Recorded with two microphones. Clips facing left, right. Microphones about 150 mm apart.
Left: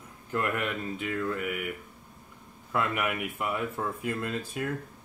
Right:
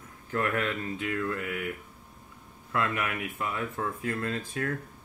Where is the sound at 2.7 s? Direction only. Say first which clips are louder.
Left 1 dB; 15° left (ahead or behind).